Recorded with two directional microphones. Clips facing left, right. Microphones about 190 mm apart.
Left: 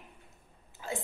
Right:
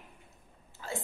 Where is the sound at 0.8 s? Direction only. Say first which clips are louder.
Left 1 dB; 15° left (ahead or behind).